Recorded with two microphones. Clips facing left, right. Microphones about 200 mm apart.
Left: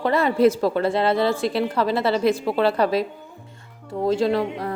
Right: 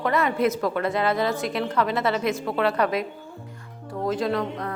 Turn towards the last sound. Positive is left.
turn(degrees=30)  # may be behind; listen again after turning